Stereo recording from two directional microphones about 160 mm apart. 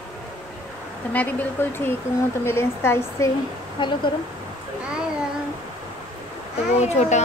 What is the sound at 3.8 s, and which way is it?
Speech, 30° left (ahead or behind).